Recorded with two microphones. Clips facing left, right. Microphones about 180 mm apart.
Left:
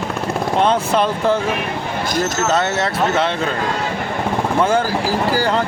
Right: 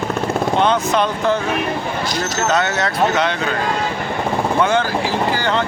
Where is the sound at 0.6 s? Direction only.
30° left (ahead or behind).